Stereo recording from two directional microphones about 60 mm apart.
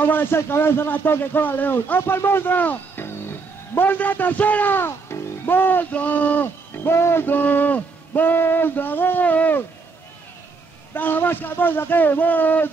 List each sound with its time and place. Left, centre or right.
0.0 s speech: left
11.0 s speech: left